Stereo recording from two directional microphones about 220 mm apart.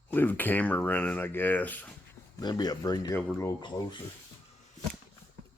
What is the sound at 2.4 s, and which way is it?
Speech, 20° left (ahead or behind).